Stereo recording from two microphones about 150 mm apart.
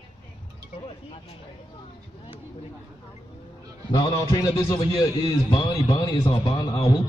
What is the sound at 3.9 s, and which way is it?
A man's voice, 20° left (ahead or behind).